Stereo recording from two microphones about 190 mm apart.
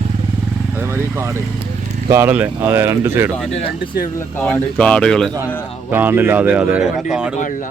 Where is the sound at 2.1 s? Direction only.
10° right (ahead or behind).